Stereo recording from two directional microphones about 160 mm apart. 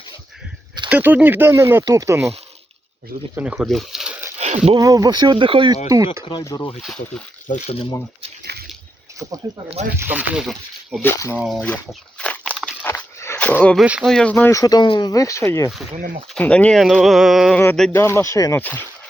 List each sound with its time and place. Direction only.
0.9 s speech: 10° right (ahead or behind)
3.3 s speech: 5° right (ahead or behind)
4.4 s a sound: 45° right (ahead or behind)
4.7 s speech: 20° right (ahead or behind)
6.4 s speech: 20° left (ahead or behind)
7.4 s speech: 50° left (ahead or behind)
10.0 s speech: 10° right (ahead or behind)
11.9 s a sound: 5° left (ahead or behind)
13.7 s speech: 5° right (ahead or behind)
14.5 s speech: 25° left (ahead or behind)
16.0 s speech: 60° right (ahead or behind)
16.3 s speech: 5° left (ahead or behind)
17.9 s speech: 15° left (ahead or behind)